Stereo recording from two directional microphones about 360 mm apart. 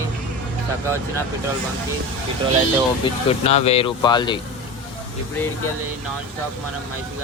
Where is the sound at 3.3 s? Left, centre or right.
Centre.